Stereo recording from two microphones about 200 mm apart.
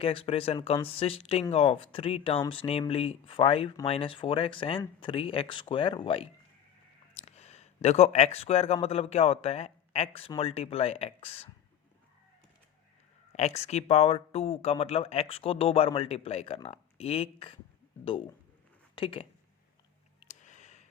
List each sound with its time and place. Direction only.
0.0 s speech: 30° left (ahead or behind)
13.3 s speech: 35° left (ahead or behind)
20.2 s a sound: 35° left (ahead or behind)